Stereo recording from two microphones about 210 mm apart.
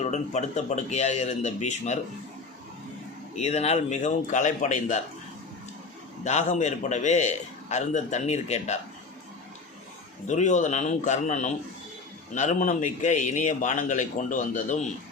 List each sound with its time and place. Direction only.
0.0 s a man's voice: 35° left (ahead or behind)
3.3 s a man's voice: 30° left (ahead or behind)
6.2 s a man's voice: 35° left (ahead or behind)
10.2 s a man's voice: 35° left (ahead or behind)